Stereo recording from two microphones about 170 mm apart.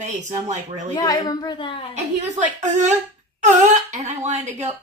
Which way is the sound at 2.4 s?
45° right (ahead or behind).